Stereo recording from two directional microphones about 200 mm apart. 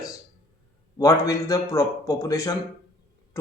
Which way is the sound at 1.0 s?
15° left (ahead or behind).